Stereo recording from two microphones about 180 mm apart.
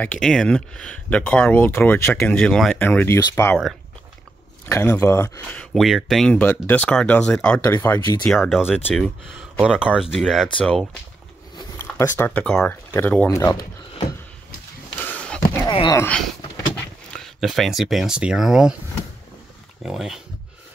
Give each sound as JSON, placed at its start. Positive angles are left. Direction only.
{"t": 0.0, "sound": "speech", "side_deg": 5}
{"t": 4.6, "sound": "speech", "side_deg": 15}
{"t": 8.3, "sound": "speech", "side_deg": 0}
{"t": 9.4, "sound": "speech", "side_deg": -5}
{"t": 11.5, "sound": "speech", "side_deg": 15}
{"t": 15.0, "sound": "a sound", "side_deg": 5}
{"t": 15.6, "sound": "speech", "side_deg": 25}
{"t": 16.0, "sound": "speech", "side_deg": 5}
{"t": 19.8, "sound": "speech", "side_deg": 0}